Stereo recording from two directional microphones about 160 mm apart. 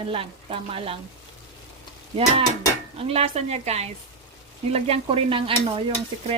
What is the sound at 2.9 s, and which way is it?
Stir, 35° right (ahead or behind).